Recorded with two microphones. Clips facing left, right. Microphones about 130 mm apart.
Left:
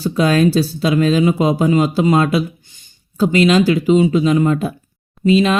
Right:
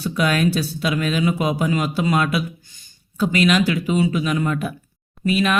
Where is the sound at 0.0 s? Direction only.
30° left (ahead or behind).